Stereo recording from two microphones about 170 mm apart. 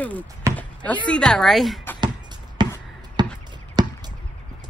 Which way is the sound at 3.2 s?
25° right (ahead or behind).